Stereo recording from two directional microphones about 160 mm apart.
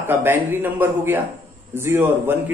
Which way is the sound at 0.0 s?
15° right (ahead or behind).